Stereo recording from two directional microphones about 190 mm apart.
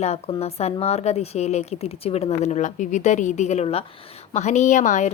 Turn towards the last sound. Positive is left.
turn(degrees=40)  # may be behind; listen again after turning